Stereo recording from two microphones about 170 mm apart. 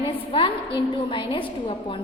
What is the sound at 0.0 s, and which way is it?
A woman's voice, 30° left (ahead or behind).